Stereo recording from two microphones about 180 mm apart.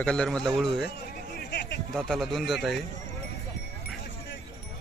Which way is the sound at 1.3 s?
70° left (ahead or behind).